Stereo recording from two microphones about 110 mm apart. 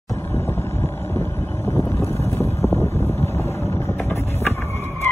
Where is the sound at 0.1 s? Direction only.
25° left (ahead or behind).